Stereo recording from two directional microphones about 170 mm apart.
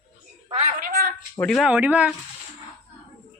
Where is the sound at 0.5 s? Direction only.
45° right (ahead or behind).